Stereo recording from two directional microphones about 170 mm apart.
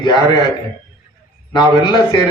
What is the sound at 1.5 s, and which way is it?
Speech, 25° left (ahead or behind).